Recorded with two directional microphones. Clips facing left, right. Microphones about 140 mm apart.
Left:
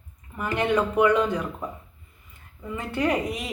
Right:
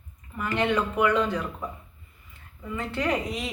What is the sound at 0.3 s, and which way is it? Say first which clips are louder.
Speech: left 2 dB; 15° left (ahead or behind).